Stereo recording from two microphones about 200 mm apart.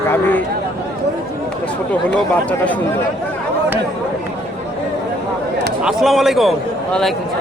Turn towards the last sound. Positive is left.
turn(degrees=0)  # may be behind; listen again after turning